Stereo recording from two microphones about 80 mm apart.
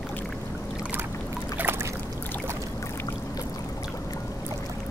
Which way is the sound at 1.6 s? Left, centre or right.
Right.